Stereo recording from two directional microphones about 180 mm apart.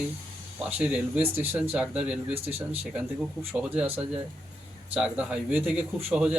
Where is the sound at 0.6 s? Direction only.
5° right (ahead or behind).